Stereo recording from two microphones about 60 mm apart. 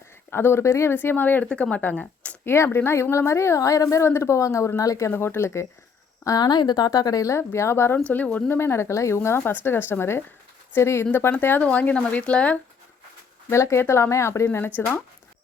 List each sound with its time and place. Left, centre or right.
0.3 s a woman's voice: left
0.9 s speech: left
1.5 s a woman's voice: centre; by 5.1 s left
5.1 s a woman's voice: left
6.3 s speech: left
6.9 s speech: left
7.3 s a woman's voice: left
7.9 s speech: left
8.4 s a woman's voice: left
9.4 s a woman's voice: left
11.6 s speech: left
13.5 s a woman's voice: left
14.8 s speech: left